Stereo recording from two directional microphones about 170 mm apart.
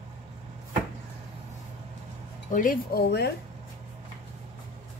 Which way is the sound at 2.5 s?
55° left (ahead or behind).